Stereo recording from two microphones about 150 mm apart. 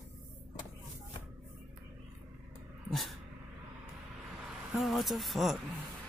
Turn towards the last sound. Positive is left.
turn(degrees=0)  # may be behind; listen again after turning